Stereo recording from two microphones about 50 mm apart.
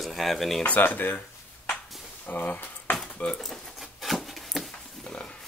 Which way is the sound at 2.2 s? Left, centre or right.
Left.